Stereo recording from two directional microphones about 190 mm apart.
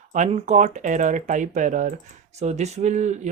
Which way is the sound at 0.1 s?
35° right (ahead or behind).